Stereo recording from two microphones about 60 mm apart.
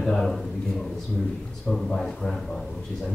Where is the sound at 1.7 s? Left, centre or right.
Centre.